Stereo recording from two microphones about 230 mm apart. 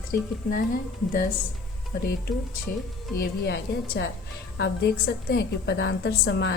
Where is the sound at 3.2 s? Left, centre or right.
Left.